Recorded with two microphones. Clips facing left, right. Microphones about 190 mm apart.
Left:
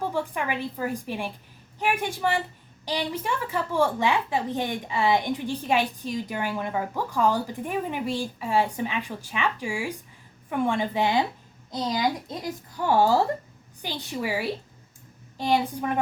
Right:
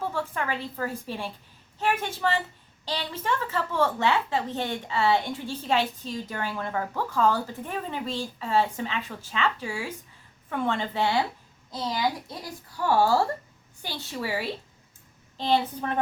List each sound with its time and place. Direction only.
0.1 s a woman's voice: 15° left (ahead or behind)